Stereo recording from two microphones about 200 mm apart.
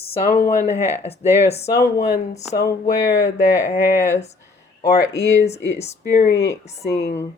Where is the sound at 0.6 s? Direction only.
15° right (ahead or behind).